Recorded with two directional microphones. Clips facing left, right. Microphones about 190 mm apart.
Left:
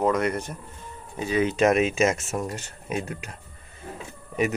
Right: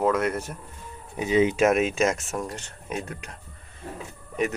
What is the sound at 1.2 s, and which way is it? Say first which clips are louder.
Speech: right 3 dB; 20° right (ahead or behind).